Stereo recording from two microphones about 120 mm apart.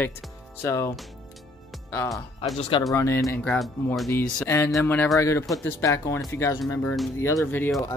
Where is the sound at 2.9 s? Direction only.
25° left (ahead or behind).